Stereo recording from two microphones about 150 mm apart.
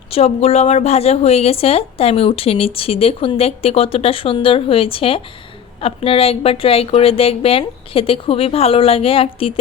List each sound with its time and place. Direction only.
0.1 s a woman's voice: 45° left (ahead or behind)